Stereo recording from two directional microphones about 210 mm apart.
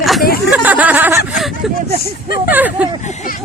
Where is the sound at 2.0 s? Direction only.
45° left (ahead or behind).